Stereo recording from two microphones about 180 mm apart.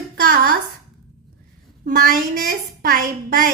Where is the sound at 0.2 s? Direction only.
50° right (ahead or behind).